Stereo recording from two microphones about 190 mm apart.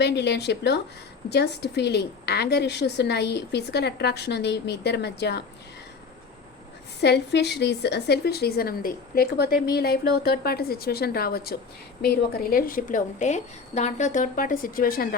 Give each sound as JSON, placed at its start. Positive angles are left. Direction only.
{"t": 0.0, "sound": "a woman's voice", "side_deg": 60}
{"t": 7.0, "sound": "a woman's voice", "side_deg": 60}